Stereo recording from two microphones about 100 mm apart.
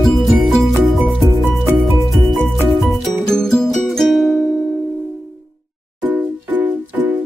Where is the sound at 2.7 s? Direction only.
Centre (ahead or behind).